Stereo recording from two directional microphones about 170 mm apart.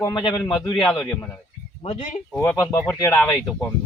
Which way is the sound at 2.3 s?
15° left (ahead or behind).